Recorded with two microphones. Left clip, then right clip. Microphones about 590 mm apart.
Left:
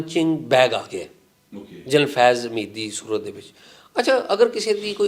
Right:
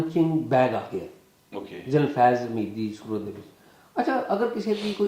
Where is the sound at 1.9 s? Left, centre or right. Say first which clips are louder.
Left 4 dB; left.